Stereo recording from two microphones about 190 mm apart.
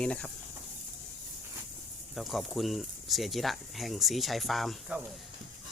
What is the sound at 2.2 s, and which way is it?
Speech, centre (ahead or behind).